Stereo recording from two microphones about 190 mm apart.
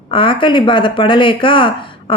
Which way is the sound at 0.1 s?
25° left (ahead or behind).